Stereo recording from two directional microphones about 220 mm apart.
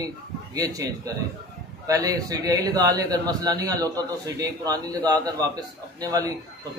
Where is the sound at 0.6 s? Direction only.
15° right (ahead or behind).